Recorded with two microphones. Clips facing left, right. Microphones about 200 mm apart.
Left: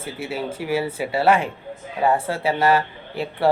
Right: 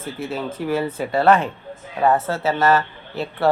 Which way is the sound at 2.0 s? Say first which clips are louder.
Right 2 dB; 30° left (ahead or behind).